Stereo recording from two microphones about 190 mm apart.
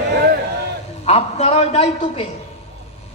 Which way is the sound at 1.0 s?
35° left (ahead or behind).